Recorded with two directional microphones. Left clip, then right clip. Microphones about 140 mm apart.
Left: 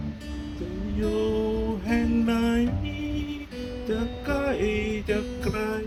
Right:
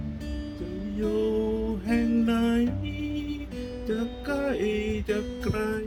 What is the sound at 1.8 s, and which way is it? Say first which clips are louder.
Music: right 1 dB; 30° right (ahead or behind).